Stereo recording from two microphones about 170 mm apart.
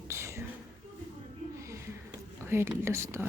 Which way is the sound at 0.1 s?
15° right (ahead or behind).